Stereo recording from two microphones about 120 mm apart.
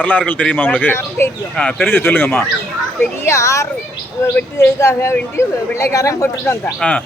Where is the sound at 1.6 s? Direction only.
10° left (ahead or behind); by 6.5 s 25° left (ahead or behind).